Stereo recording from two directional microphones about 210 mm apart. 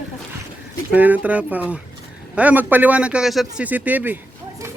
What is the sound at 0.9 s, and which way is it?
A man's voice, 5° right (ahead or behind).